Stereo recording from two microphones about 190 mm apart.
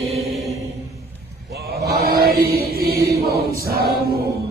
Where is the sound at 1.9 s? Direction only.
55° right (ahead or behind).